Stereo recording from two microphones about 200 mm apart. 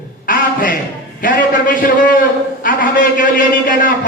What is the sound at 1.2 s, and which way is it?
A man's voice, 45° left (ahead or behind).